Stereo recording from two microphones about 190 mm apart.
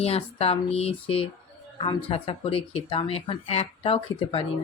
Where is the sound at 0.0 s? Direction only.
30° left (ahead or behind).